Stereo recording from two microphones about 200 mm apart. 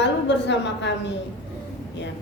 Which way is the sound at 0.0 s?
60° left (ahead or behind).